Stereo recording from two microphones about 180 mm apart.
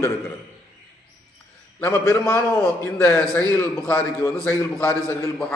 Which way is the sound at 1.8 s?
15° left (ahead or behind).